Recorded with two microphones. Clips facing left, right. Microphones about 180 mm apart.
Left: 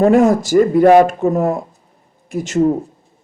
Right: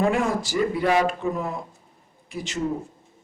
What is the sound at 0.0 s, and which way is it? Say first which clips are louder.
Speech: left 11 dB; 40° left (ahead or behind).